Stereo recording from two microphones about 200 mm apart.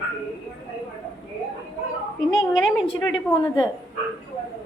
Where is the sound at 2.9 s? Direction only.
20° left (ahead or behind).